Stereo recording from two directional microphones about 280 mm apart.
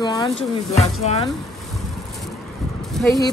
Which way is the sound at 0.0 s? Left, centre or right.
Centre.